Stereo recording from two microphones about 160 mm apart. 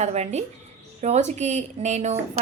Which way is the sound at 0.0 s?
45° right (ahead or behind).